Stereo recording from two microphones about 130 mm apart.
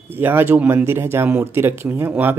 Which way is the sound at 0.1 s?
15° right (ahead or behind).